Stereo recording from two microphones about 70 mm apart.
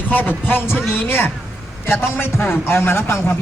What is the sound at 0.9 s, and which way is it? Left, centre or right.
A man's voice, left.